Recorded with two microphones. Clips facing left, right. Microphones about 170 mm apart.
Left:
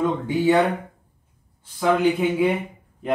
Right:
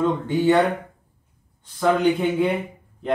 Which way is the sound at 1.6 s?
5° left (ahead or behind).